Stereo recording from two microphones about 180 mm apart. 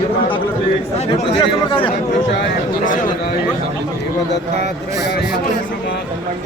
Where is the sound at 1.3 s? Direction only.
30° left (ahead or behind).